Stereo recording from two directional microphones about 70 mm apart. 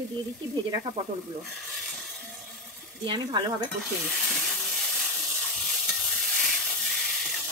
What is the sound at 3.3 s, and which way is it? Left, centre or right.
Stir, right.